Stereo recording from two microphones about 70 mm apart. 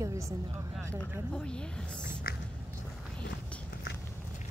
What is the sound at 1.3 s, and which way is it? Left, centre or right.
Speech, centre.